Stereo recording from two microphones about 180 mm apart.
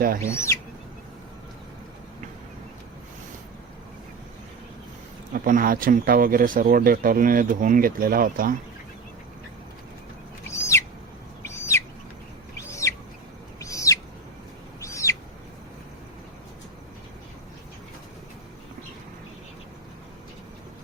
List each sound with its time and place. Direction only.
0.2 s speech: 15° left (ahead or behind)
5.3 s speech: 50° right (ahead or behind)
10.5 s owl: 15° left (ahead or behind)